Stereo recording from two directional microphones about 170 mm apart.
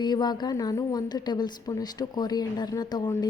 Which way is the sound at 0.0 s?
25° left (ahead or behind).